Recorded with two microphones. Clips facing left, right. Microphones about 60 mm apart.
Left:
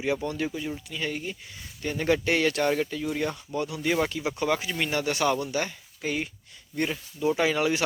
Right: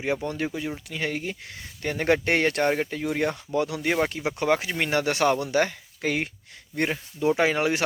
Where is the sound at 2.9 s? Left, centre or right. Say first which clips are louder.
Right 3 dB; right.